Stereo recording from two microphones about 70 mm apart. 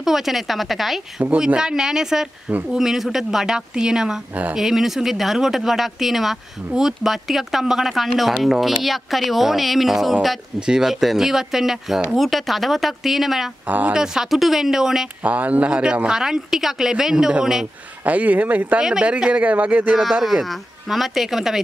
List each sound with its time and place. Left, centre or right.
0.0 s speech: centre
4.3 s speech: right
4.6 s speech: centre
13.7 s speech: right
13.9 s speech: centre
15.2 s speech: right
18.0 s speech: right
18.9 s speech: centre
20.0 s speech: centre